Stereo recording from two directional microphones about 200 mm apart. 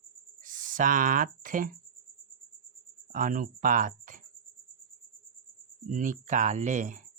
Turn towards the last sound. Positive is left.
turn(degrees=-40)  # may be behind; listen again after turning